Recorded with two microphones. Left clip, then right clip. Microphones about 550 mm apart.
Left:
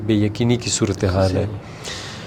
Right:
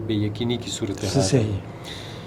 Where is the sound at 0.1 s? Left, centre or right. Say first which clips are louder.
Left 7 dB; left.